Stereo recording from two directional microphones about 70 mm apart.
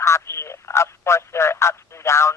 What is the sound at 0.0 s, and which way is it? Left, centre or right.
Fowl, left.